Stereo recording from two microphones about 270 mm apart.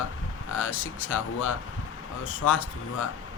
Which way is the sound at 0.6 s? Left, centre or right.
Left.